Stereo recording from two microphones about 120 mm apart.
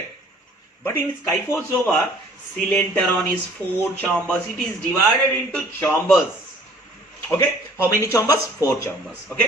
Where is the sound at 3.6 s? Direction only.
30° right (ahead or behind).